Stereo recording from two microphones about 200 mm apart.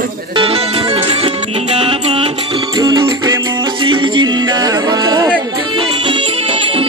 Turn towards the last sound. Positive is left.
turn(degrees=-25)  # may be behind; listen again after turning